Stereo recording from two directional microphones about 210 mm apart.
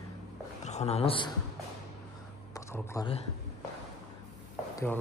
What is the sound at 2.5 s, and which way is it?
Speech, 15° left (ahead or behind).